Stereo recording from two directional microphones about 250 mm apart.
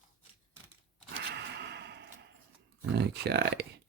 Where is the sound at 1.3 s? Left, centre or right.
Right.